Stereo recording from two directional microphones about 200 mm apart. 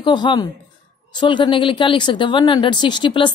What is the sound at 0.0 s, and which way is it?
A woman's voice, 25° left (ahead or behind).